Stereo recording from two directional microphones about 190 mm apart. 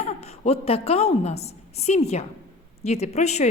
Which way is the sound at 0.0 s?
35° left (ahead or behind).